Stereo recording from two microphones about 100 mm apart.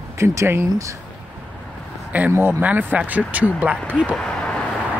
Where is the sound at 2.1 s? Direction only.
15° right (ahead or behind).